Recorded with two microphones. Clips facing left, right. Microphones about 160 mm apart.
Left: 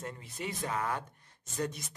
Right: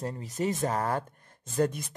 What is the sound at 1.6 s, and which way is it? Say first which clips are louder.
Speech: right 8 dB; 55° right (ahead or behind).